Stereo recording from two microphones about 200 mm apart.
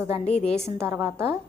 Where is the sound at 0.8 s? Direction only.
15° right (ahead or behind).